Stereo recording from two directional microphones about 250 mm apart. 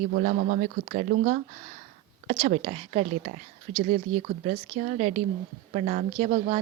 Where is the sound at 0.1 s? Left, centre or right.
Right.